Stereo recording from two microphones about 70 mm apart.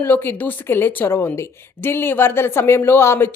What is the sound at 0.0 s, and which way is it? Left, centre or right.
A woman's voice, left.